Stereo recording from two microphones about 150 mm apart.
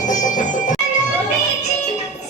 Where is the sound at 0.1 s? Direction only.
60° left (ahead or behind).